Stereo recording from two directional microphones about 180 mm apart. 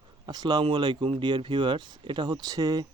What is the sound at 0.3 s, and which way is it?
Speech, 25° right (ahead or behind).